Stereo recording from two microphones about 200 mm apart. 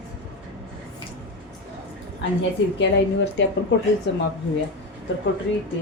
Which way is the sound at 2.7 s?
65° left (ahead or behind).